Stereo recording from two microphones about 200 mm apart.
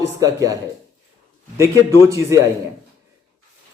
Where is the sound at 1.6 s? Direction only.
15° right (ahead or behind).